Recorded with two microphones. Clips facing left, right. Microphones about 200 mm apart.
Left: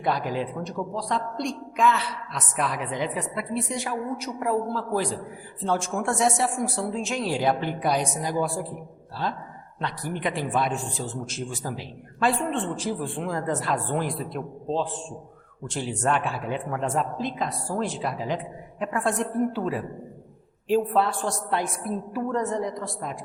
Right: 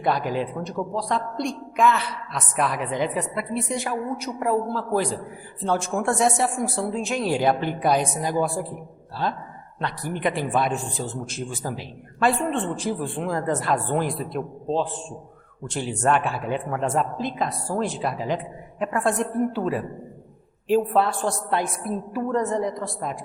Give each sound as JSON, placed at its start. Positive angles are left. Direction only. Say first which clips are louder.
{"t": 0.0, "sound": "a woman's voice", "louder": "right 2 dB", "side_deg": -55}
{"t": 15.6, "sound": "a woman's voice", "louder": "right 3 dB", "side_deg": -60}